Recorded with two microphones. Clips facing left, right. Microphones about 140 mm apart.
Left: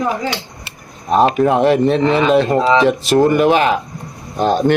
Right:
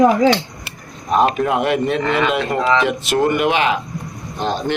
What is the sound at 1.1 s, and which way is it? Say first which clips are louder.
Speech: left 3 dB; 30° left (ahead or behind).